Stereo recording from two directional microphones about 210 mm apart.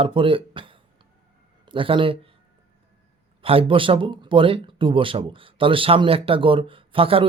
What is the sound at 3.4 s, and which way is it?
A man's voice, 25° right (ahead or behind).